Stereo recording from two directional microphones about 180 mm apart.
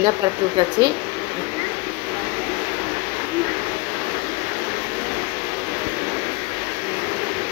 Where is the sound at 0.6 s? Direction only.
25° right (ahead or behind).